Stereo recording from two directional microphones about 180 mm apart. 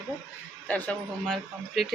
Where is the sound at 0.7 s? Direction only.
10° left (ahead or behind).